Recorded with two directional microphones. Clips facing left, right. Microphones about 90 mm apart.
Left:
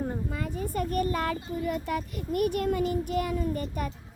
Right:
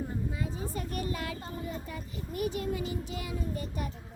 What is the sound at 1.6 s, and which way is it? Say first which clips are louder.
A child's voice: left 9 dB; 75° left (ahead or behind).